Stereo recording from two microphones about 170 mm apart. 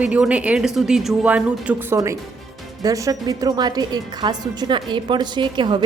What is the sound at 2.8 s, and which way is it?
A woman's voice, 20° right (ahead or behind).